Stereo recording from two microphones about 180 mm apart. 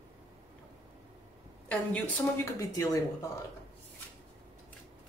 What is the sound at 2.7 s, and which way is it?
Speech, 20° left (ahead or behind).